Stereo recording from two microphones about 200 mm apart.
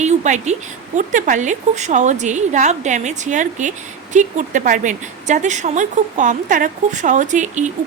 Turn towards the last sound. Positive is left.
turn(degrees=-35)  # may be behind; listen again after turning